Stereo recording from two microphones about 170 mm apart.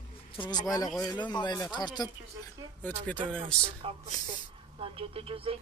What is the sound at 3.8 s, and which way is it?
Speech, 35° right (ahead or behind).